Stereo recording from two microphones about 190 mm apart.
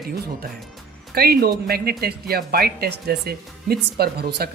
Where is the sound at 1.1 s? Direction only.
55° right (ahead or behind).